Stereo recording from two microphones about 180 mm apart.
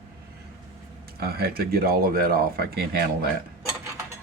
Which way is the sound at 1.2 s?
60° right (ahead or behind).